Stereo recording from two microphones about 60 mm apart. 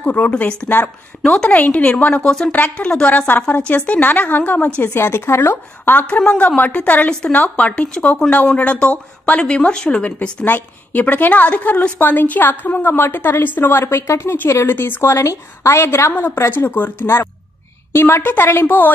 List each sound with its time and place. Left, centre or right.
0.0 s speech: left
0.4 s a woman's voice: centre
0.7 s a woman's voice: left
4.9 s a woman's voice: left
6.0 s speech: left
7.1 s a woman's voice: centre
7.3 s speech: left
10.4 s a woman's voice: left
15.0 s a woman's voice: left